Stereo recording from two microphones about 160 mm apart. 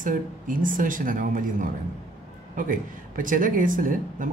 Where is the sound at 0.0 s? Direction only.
55° right (ahead or behind).